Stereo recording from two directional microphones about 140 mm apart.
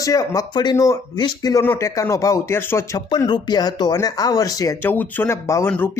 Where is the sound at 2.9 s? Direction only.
30° left (ahead or behind).